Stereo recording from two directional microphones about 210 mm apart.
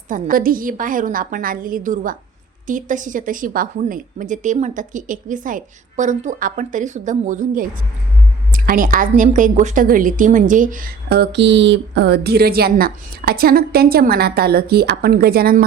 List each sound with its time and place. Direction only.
0.1 s a woman's voice: 40° right (ahead or behind)